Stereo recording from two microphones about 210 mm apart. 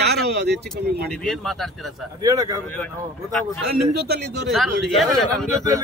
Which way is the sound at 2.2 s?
15° right (ahead or behind).